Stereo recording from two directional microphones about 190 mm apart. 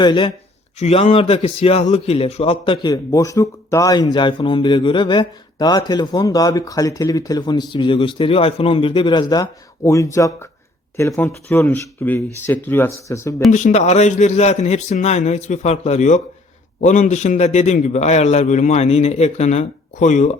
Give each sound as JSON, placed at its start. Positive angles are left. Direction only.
{"t": 0.0, "sound": "a man's voice", "side_deg": 25}
{"t": 0.8, "sound": "a man's voice", "side_deg": 35}
{"t": 13.5, "sound": "a man's voice", "side_deg": 40}